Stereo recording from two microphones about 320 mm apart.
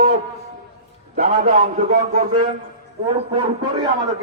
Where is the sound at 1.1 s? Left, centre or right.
Right.